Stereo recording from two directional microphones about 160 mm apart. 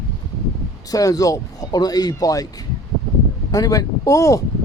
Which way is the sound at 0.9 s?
20° left (ahead or behind).